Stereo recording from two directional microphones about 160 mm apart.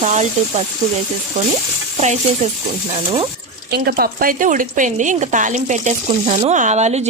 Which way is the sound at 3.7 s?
75° right (ahead or behind).